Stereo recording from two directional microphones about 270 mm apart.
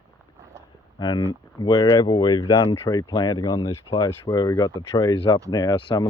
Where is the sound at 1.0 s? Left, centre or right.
Centre.